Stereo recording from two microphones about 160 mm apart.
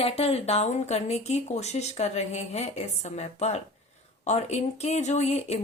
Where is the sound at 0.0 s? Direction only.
40° left (ahead or behind).